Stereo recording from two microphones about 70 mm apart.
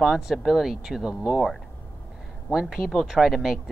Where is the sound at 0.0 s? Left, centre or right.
Centre.